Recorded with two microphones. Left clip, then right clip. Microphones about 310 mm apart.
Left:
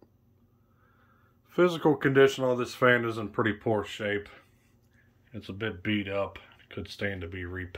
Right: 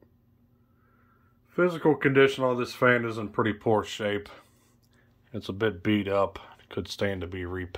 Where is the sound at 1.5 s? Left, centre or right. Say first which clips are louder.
Even; centre.